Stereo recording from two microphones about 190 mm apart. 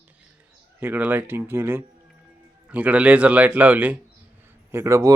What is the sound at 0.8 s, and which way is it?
Speech, 10° right (ahead or behind).